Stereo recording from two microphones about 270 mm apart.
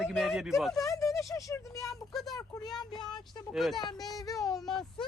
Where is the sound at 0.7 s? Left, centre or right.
Centre.